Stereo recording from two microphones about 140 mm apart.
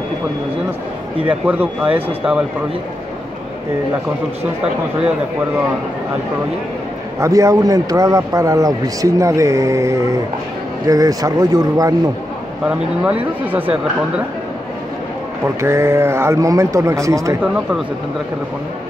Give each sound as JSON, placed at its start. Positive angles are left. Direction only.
{"t": 1.2, "sound": "speech", "side_deg": -10}
{"t": 7.2, "sound": "a man's voice", "side_deg": -20}
{"t": 12.6, "sound": "speech", "side_deg": -10}
{"t": 15.4, "sound": "a man's voice", "side_deg": -20}